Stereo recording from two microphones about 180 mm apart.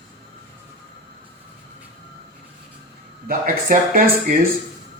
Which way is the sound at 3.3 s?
50° right (ahead or behind).